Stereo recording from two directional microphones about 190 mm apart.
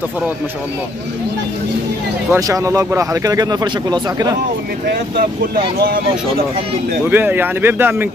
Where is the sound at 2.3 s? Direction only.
15° right (ahead or behind).